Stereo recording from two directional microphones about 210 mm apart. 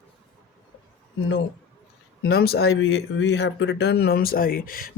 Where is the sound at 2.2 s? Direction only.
50° left (ahead or behind).